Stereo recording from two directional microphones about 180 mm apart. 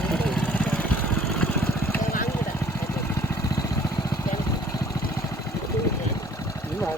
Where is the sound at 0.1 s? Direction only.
5° left (ahead or behind).